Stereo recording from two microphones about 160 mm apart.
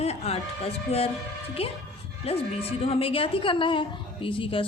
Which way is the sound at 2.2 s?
35° left (ahead or behind).